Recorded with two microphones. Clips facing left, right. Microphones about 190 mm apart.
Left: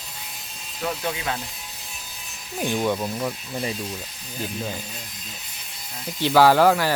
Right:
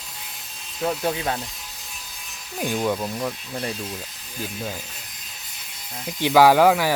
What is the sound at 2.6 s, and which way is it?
Speech, 5° right (ahead or behind).